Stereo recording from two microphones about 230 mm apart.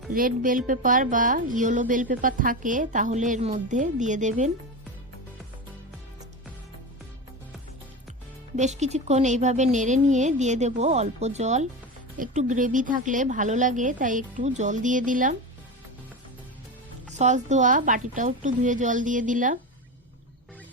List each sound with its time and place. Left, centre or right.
0.1 s a woman's voice: right
8.5 s a woman's voice: right
17.2 s a woman's voice: right